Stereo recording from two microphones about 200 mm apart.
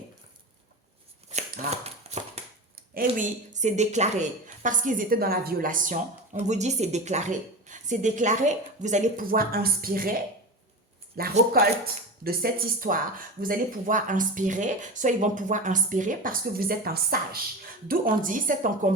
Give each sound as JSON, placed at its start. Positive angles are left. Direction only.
{"t": 1.3, "sound": "a sound", "side_deg": -35}
{"t": 2.9, "sound": "speech", "side_deg": -40}
{"t": 11.2, "sound": "a woman's voice", "side_deg": -50}